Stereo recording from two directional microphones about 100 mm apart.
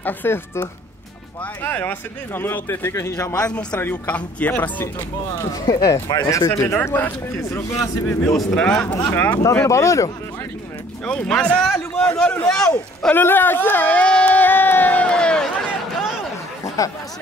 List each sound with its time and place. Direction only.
0.0 s speech: 20° left (ahead or behind)
3.4 s speech: 10° left (ahead or behind)
5.3 s speech: 35° left (ahead or behind)
6.6 s speech: 25° left (ahead or behind)
7.7 s speech: 35° left (ahead or behind)
8.5 s speech: 10° left (ahead or behind)
8.8 s speech: 40° left (ahead or behind)
9.1 s speech: 20° left (ahead or behind)
9.4 s speech: 30° left (ahead or behind)
11.1 s speech: 10° left (ahead or behind)
13.1 s a sound: 20° left (ahead or behind)